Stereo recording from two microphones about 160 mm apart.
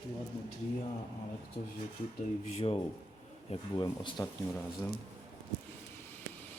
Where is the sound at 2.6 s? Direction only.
40° left (ahead or behind).